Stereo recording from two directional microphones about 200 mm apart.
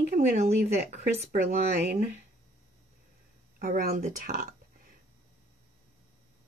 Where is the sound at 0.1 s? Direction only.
45° right (ahead or behind).